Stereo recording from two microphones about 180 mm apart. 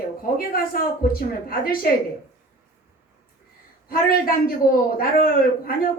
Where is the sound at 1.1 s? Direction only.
55° left (ahead or behind).